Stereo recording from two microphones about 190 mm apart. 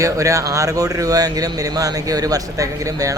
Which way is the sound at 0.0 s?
15° right (ahead or behind).